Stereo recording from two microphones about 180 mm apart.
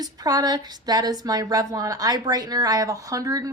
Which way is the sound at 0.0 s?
20° right (ahead or behind).